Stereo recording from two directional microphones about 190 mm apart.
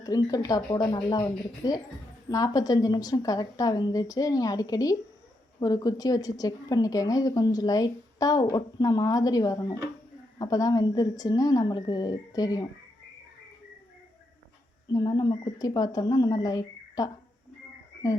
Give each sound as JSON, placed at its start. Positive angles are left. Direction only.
{"t": 0.0, "sound": "a woman's voice", "side_deg": 20}
{"t": 14.9, "sound": "a woman's voice", "side_deg": 20}